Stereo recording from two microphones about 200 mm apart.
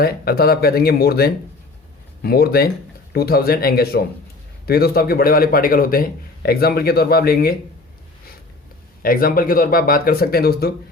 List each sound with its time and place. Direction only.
0.0 s a man's voice: 50° left (ahead or behind)
9.0 s a man's voice: 45° left (ahead or behind)